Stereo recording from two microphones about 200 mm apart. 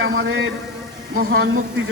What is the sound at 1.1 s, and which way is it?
Speech, 45° right (ahead or behind).